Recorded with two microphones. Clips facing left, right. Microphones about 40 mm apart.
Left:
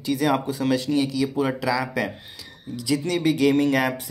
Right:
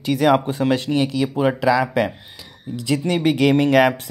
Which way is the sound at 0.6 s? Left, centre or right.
Right.